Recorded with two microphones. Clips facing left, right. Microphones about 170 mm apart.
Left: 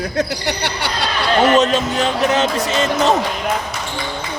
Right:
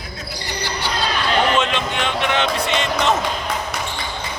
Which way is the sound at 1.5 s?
40° left (ahead or behind).